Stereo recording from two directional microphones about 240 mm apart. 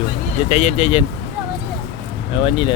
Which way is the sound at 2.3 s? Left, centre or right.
Left.